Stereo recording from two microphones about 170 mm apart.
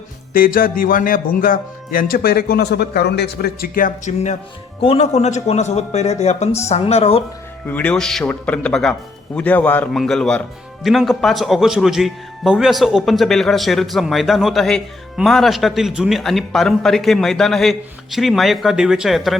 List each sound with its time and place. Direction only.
0.3 s a man's voice: 60° left (ahead or behind); by 7.2 s 35° left (ahead or behind)
7.7 s a man's voice: 10° left (ahead or behind)